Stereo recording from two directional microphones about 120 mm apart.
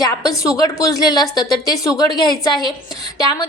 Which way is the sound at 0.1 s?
30° left (ahead or behind).